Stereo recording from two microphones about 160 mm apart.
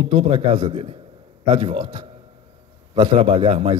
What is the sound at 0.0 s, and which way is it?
A man's voice, 35° right (ahead or behind).